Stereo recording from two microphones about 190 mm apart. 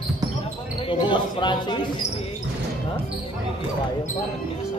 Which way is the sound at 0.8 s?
25° left (ahead or behind).